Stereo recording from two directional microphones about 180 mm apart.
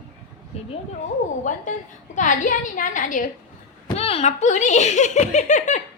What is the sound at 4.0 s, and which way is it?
A child's voice, 35° left (ahead or behind).